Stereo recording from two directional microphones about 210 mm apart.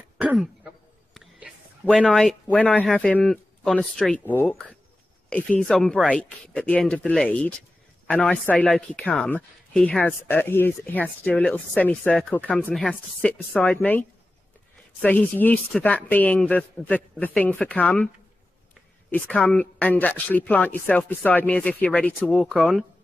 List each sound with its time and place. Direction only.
0.2 s throat clearing: 5° right (ahead or behind)
1.1 s speech: centre (ahead or behind)